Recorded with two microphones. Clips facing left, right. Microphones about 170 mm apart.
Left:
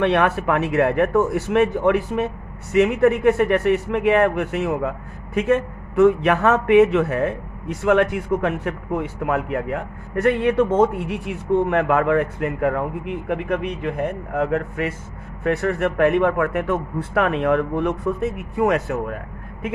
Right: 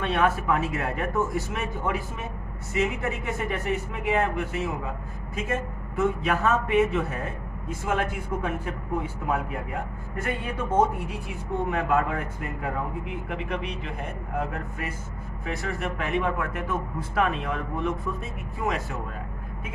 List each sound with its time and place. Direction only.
0.0 s speech: 70° left (ahead or behind)
15.4 s a man's voice: 60° left (ahead or behind)